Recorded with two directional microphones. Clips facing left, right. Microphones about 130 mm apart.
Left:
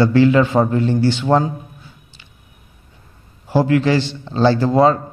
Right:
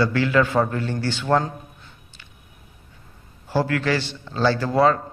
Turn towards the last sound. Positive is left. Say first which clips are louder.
# left 5 dB
turn(degrees=25)  # may be behind; listen again after turning